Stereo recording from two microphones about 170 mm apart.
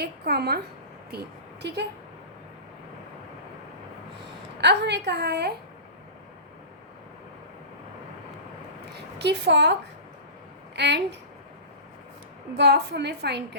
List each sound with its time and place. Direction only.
0.0 s a woman's voice: 70° right (ahead or behind)
4.6 s a woman's voice: 90° right
8.9 s a woman's voice: 85° right
10.8 s a woman's voice: 85° right
12.5 s a woman's voice: 80° right